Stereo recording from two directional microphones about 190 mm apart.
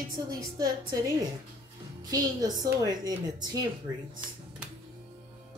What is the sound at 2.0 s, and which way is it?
Speech, 20° right (ahead or behind).